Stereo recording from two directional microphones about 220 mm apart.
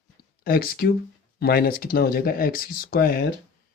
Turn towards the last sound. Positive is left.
turn(degrees=45)  # may be behind; listen again after turning